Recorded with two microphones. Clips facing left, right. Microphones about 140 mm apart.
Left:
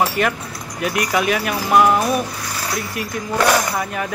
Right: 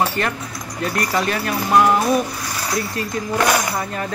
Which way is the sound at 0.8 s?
10° left (ahead or behind).